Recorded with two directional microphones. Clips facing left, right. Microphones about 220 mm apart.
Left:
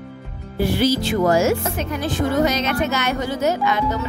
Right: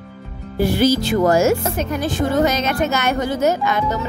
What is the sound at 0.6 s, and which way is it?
A woman's voice, 45° right (ahead or behind).